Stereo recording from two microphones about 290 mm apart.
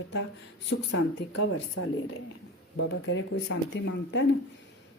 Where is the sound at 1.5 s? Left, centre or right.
Left.